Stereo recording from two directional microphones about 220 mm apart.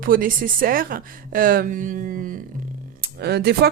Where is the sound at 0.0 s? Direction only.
40° right (ahead or behind).